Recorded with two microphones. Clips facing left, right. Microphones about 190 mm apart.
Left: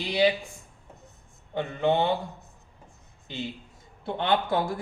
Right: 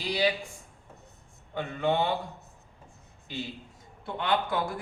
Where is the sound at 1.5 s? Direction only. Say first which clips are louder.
Left 3 dB; 25° left (ahead or behind).